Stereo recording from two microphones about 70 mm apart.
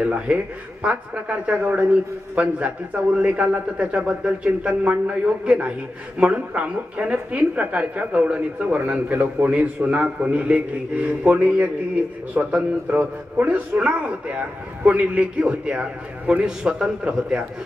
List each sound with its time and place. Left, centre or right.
0.0 s a man's voice: centre